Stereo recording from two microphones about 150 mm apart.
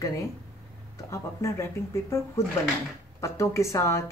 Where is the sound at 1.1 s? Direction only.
20° left (ahead or behind).